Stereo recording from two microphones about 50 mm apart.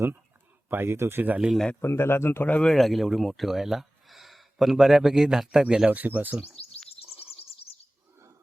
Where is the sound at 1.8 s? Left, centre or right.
Left.